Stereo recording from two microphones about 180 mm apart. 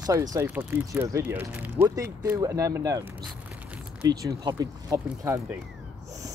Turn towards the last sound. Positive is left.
turn(degrees=-15)  # may be behind; listen again after turning